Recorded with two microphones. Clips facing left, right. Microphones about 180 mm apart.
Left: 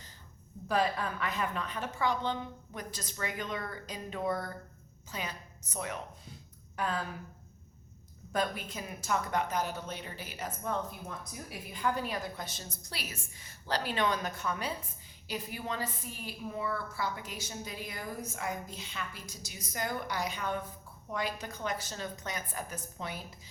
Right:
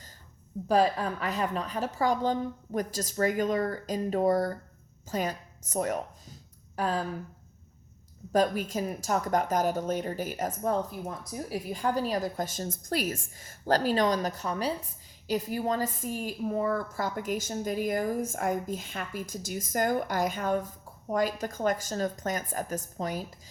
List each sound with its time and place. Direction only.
0.7 s a woman's voice: 35° right (ahead or behind)
8.3 s a woman's voice: 40° right (ahead or behind)